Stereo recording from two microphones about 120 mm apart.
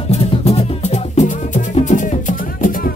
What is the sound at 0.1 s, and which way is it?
Music, 60° left (ahead or behind).